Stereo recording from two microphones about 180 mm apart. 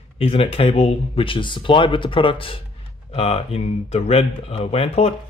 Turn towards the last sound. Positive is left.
turn(degrees=35)  # may be behind; listen again after turning